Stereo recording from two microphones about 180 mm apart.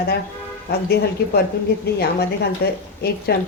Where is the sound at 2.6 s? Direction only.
65° left (ahead or behind).